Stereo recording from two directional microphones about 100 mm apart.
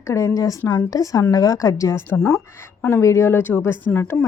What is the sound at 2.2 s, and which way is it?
Speech, 10° left (ahead or behind).